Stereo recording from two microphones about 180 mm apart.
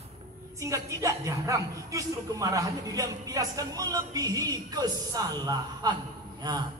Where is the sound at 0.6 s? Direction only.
15° right (ahead or behind).